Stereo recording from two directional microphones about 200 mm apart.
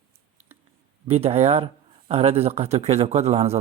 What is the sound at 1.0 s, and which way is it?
A man's voice, 30° right (ahead or behind).